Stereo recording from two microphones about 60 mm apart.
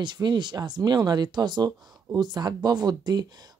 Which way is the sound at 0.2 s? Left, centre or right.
Right.